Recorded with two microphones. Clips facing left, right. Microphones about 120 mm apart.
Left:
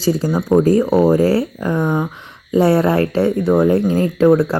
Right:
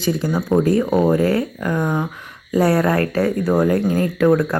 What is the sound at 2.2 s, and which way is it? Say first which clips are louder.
Speech: left 3 dB; 25° left (ahead or behind).